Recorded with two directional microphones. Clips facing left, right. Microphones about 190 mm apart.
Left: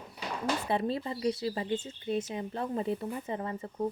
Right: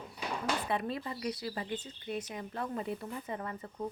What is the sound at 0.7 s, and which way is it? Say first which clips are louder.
Speech: left 4 dB; 30° left (ahead or behind).